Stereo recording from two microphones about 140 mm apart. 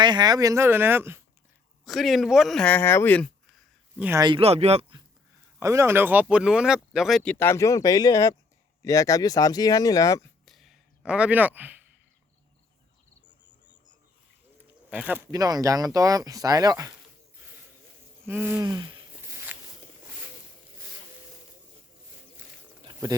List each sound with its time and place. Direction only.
0.0 s speech: 30° right (ahead or behind)
1.8 s speech: centre (ahead or behind)
3.9 s speech: 10° right (ahead or behind)
4.4 s speech: 45° right (ahead or behind)
5.5 s speech: 20° right (ahead or behind); by 10.2 s 25° left (ahead or behind)
10.4 s a sound: centre (ahead or behind)
14.8 s speech: 10° right (ahead or behind)
15.3 s speech: 25° right (ahead or behind)
18.3 s a sound: 15° right (ahead or behind)
18.6 s a sound: 30° right (ahead or behind)